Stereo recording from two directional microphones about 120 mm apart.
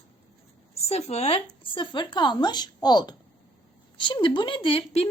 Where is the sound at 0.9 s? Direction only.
60° left (ahead or behind).